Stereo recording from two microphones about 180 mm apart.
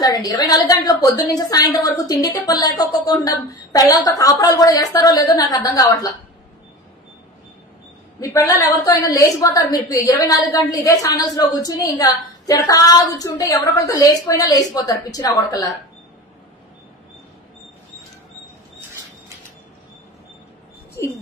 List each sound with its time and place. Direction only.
0.0 s a woman's voice: 20° left (ahead or behind)
8.2 s a woman's voice: 15° left (ahead or behind)
21.0 s a sound: 15° left (ahead or behind)